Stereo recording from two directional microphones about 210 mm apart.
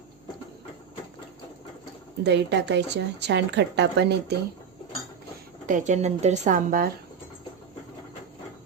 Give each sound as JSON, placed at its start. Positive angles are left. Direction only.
{"t": 2.2, "sound": "a woman's voice", "side_deg": -55}
{"t": 5.6, "sound": "a woman's voice", "side_deg": -35}